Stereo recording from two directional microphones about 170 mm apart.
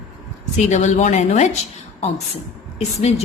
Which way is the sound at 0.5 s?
45° left (ahead or behind).